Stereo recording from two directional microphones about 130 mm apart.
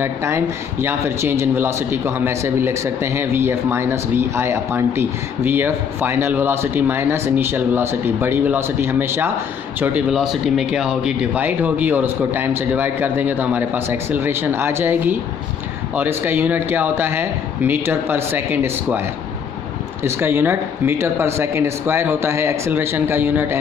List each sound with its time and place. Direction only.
0.0 s a man's voice: 20° right (ahead or behind)